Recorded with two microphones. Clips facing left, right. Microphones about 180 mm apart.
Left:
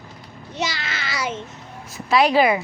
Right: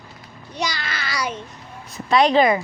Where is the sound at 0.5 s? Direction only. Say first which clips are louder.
Even; 25° left (ahead or behind).